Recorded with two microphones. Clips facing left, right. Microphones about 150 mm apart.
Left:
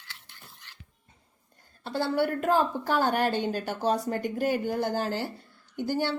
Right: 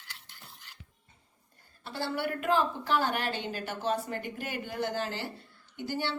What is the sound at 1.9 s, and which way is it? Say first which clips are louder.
Speech: left 6 dB; 45° left (ahead or behind).